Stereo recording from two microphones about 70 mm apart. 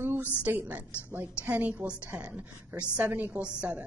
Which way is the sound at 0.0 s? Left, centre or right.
Right.